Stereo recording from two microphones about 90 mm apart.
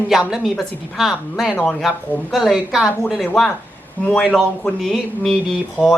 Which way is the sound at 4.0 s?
20° left (ahead or behind).